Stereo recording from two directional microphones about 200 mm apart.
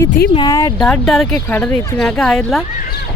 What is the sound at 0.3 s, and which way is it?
Speech, 20° left (ahead or behind).